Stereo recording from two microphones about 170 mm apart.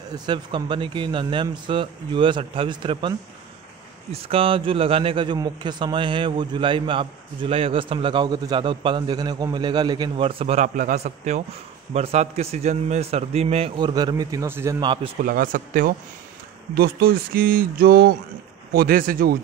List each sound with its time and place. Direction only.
0.1 s a man's voice: 25° right (ahead or behind)
14.8 s a man's voice: 30° right (ahead or behind)
15.2 s speech: 55° right (ahead or behind)
16.7 s speech: 65° right (ahead or behind)